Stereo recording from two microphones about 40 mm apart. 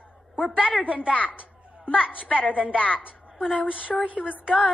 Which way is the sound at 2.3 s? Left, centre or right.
Right.